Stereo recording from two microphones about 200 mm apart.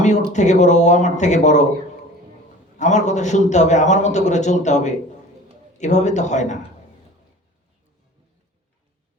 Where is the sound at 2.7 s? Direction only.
35° left (ahead or behind).